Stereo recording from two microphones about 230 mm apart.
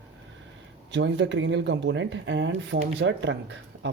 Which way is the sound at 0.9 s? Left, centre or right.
Right.